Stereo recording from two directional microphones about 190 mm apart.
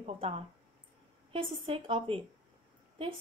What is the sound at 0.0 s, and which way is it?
Speech, 30° right (ahead or behind).